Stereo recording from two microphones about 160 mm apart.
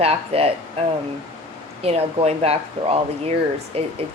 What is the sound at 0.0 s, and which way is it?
Speech, 40° right (ahead or behind).